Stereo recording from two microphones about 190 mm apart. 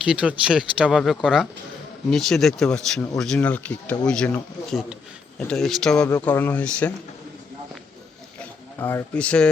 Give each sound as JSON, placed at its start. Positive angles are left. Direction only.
{"t": 0.0, "sound": "speech", "side_deg": -5}
{"t": 6.1, "sound": "speech", "side_deg": 15}
{"t": 8.4, "sound": "speech", "side_deg": 10}